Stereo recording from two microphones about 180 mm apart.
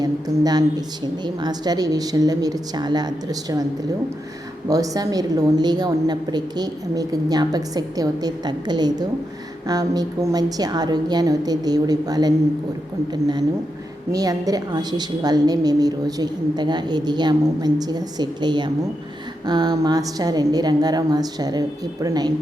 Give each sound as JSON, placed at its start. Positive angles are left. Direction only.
{"t": 0.0, "sound": "a woman's voice", "side_deg": -20}
{"t": 4.7, "sound": "a woman's voice", "side_deg": -20}
{"t": 14.1, "sound": "a woman's voice", "side_deg": -20}